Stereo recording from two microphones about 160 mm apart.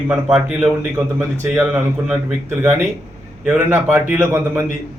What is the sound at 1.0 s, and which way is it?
Speech, 20° right (ahead or behind).